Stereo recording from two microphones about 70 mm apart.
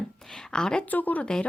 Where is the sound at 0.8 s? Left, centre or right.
Left.